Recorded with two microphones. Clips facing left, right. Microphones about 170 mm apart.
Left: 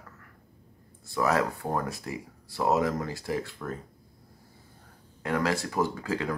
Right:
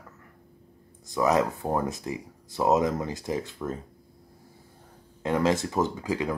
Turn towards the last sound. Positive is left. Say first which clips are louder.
# right 2 dB
turn(degrees=-15)  # may be behind; listen again after turning